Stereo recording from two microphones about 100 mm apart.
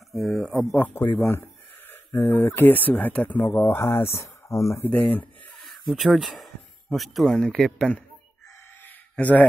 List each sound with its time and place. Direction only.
0.1 s speech: centre (ahead or behind)
0.7 s speech: 15° left (ahead or behind)
3.7 s speech: 30° left (ahead or behind)
4.8 s a sound: 15° left (ahead or behind)
5.7 s speech: centre (ahead or behind)
8.8 s a sound: 15° left (ahead or behind)